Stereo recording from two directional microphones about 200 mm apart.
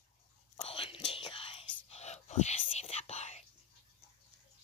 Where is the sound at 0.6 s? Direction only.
25° left (ahead or behind).